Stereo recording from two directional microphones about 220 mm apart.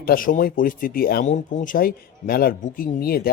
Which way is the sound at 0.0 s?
40° left (ahead or behind).